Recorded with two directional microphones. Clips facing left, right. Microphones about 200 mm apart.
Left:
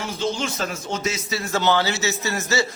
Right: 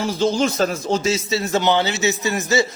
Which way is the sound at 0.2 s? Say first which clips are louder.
Right 7 dB; 40° right (ahead or behind).